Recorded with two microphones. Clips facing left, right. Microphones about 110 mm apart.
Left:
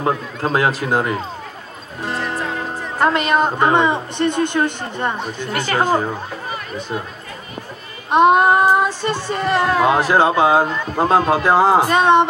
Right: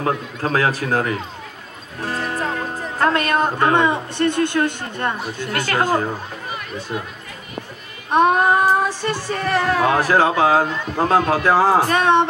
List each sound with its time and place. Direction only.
0.0 s speech: 20° left (ahead or behind)
2.0 s music: 20° left (ahead or behind)
2.5 s speech: 20° left (ahead or behind)
8.1 s speech: 20° left (ahead or behind)